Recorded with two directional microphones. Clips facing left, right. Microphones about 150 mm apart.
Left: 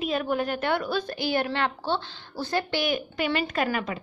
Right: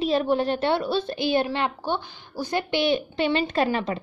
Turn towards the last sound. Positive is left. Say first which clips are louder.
# right 4 dB
turn(degrees=-30)  # may be behind; listen again after turning